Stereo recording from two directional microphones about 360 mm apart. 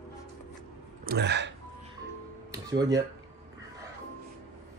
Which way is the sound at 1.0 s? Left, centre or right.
Right.